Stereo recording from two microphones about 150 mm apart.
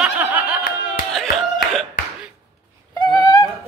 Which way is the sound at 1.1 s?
Centre (ahead or behind).